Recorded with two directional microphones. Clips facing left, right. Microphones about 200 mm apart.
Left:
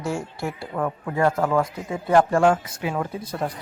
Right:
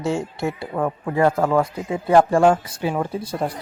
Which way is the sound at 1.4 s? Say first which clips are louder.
Right 3 dB; 40° right (ahead or behind).